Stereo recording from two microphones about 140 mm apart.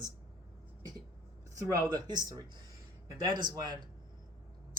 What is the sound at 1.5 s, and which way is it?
Speech, 25° right (ahead or behind).